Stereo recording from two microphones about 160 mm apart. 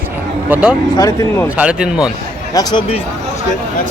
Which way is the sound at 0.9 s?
20° left (ahead or behind).